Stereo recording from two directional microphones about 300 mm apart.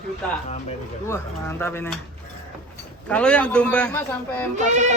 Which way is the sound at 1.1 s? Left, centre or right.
Centre.